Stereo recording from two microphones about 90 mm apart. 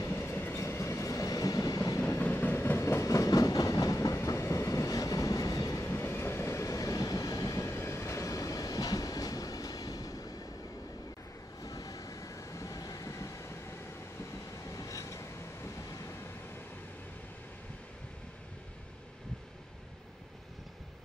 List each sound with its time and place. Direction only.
0.0 s train: 25° left (ahead or behind); by 2.0 s 40° left (ahead or behind)
2.0 s train: 20° left (ahead or behind); by 7.7 s 40° left (ahead or behind)
7.7 s train: 30° left (ahead or behind)
11.6 s train: 40° left (ahead or behind)